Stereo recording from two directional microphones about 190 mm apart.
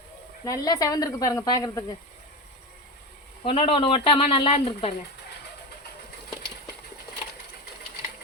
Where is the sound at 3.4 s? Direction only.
30° left (ahead or behind).